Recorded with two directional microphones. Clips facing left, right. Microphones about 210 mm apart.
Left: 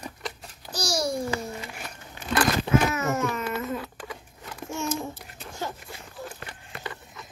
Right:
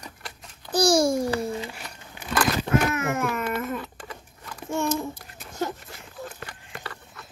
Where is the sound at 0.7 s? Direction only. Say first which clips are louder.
Right 8 dB; 55° right (ahead or behind).